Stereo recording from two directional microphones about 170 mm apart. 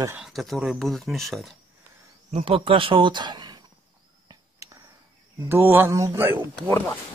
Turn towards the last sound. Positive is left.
turn(degrees=10)  # may be behind; listen again after turning